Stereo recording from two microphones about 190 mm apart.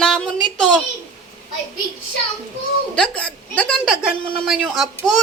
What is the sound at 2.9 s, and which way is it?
A woman's voice, 5° left (ahead or behind).